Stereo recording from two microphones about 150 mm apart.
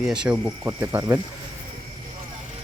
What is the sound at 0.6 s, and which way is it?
Speech, 15° right (ahead or behind).